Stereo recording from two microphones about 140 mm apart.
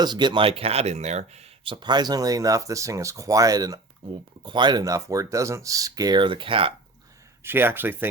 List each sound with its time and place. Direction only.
0.0 s speech: 30° right (ahead or behind)
7.4 s speech: 15° right (ahead or behind)